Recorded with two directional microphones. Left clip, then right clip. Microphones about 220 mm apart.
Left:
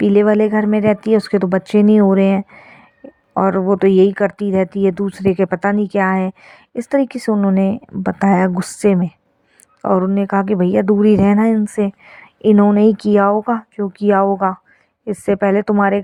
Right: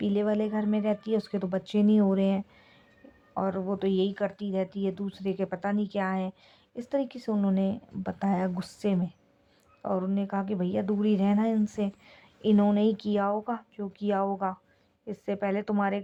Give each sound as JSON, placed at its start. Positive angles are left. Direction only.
{"t": 0.0, "sound": "a woman's voice", "side_deg": 40}